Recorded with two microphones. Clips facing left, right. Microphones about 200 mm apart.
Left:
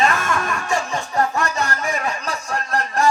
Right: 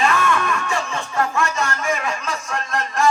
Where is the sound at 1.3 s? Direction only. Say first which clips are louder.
Right 1 dB; 35° left (ahead or behind).